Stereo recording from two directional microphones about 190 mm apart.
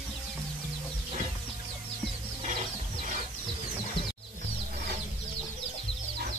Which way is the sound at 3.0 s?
45° right (ahead or behind).